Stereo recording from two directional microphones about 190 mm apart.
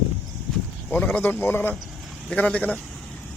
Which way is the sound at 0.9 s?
10° left (ahead or behind).